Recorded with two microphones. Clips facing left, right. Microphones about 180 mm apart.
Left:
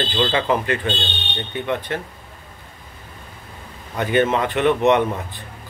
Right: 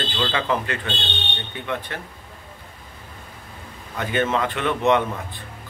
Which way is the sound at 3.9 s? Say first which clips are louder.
Left 4 dB; 20° left (ahead or behind).